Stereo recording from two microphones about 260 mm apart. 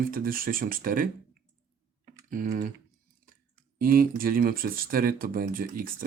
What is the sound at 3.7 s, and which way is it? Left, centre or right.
Speech, right.